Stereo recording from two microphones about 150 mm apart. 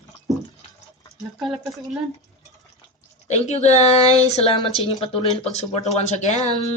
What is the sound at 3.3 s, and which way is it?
Speech, 50° left (ahead or behind).